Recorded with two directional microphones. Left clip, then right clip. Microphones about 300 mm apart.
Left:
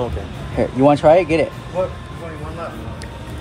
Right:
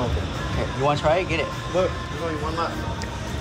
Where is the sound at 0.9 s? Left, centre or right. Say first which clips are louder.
Left 9 dB; left.